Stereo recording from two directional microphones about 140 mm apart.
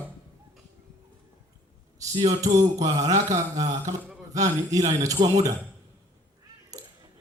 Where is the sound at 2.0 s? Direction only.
25° right (ahead or behind).